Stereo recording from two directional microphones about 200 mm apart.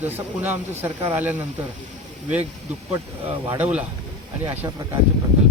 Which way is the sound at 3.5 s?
10° right (ahead or behind).